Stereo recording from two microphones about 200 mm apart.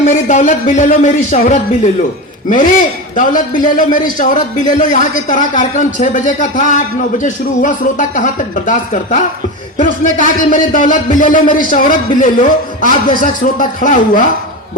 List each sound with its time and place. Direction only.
0.0 s a man's voice: 40° left (ahead or behind)
3.2 s a man's voice: 40° left (ahead or behind)